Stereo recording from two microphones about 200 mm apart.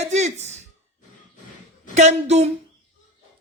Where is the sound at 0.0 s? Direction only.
35° right (ahead or behind).